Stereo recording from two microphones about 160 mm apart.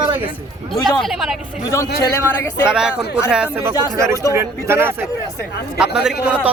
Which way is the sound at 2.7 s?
5° right (ahead or behind).